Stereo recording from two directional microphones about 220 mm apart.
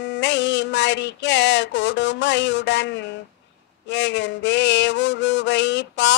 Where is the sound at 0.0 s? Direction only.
55° left (ahead or behind).